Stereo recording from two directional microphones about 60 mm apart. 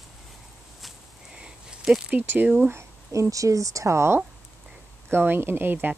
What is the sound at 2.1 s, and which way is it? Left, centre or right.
Speech, right.